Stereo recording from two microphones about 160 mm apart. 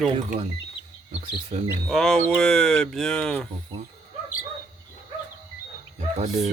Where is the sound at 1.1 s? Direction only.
45° right (ahead or behind).